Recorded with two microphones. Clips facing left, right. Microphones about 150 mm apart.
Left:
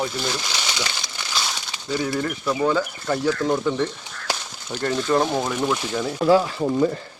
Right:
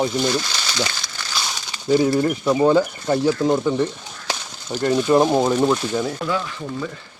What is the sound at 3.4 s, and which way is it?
Speech, 15° right (ahead or behind).